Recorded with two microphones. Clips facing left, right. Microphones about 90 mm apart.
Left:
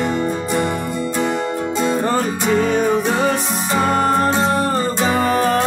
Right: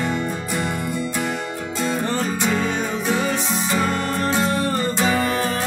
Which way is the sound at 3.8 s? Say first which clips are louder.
Left 10 dB; 35° left (ahead or behind).